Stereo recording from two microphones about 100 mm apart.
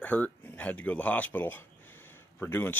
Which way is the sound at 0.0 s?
15° left (ahead or behind).